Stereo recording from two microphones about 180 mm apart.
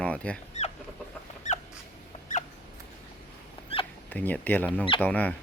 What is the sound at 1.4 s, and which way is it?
Dog, 40° left (ahead or behind).